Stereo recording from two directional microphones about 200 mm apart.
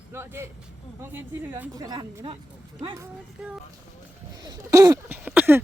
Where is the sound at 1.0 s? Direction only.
10° right (ahead or behind).